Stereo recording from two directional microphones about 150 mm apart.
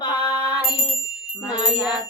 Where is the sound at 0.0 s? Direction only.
30° left (ahead or behind).